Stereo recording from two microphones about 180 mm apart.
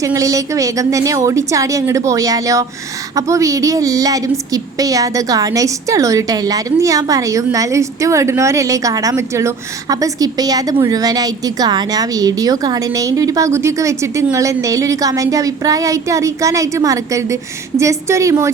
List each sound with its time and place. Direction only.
0.0 s a woman's voice: 20° right (ahead or behind)